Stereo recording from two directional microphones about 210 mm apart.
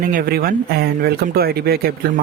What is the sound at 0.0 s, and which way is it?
Speech, 40° right (ahead or behind).